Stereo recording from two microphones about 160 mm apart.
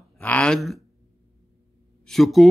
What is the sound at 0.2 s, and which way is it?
Speech, 10° left (ahead or behind).